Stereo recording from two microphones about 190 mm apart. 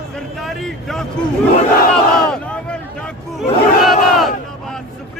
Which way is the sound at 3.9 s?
Centre (ahead or behind).